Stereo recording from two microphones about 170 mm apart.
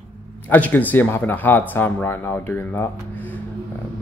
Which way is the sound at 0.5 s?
10° left (ahead or behind).